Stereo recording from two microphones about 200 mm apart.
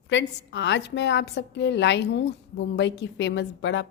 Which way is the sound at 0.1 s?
65° left (ahead or behind).